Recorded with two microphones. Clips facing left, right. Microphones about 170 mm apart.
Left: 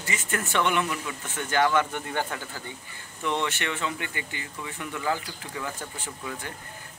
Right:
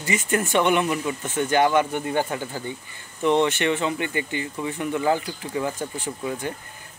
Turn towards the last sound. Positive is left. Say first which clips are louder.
# right 8 dB
turn(degrees=-20)  # may be behind; listen again after turning